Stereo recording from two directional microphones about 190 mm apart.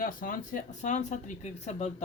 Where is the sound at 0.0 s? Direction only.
45° left (ahead or behind).